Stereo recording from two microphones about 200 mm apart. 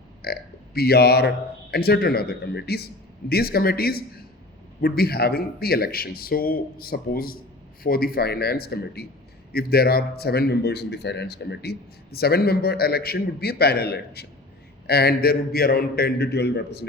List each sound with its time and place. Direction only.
0.2 s a man's voice: 50° left (ahead or behind)